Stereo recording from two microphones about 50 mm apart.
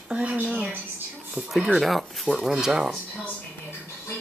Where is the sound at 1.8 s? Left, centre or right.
Centre.